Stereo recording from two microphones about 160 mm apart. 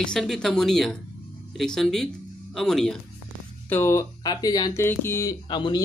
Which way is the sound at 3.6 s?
15° left (ahead or behind).